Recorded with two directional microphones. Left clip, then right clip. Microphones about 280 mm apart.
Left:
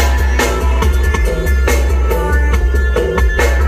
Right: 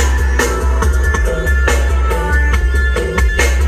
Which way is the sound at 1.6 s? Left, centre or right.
Left.